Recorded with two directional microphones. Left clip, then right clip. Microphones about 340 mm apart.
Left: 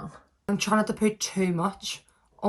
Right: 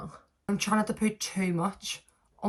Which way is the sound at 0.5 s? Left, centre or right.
Left.